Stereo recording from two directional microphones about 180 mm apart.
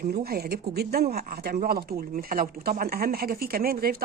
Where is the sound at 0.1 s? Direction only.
60° right (ahead or behind).